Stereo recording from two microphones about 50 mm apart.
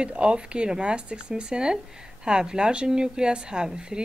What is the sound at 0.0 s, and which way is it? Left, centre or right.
Speech, right.